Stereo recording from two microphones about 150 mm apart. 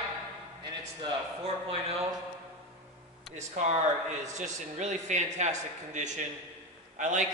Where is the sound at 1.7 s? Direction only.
40° right (ahead or behind).